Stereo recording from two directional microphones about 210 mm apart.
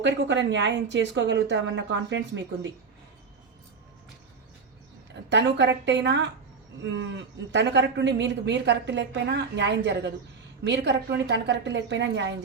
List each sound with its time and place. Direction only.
0.0 s speech: 60° right (ahead or behind)
5.3 s speech: 55° right (ahead or behind)